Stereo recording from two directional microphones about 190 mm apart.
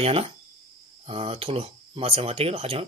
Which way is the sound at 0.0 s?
30° right (ahead or behind).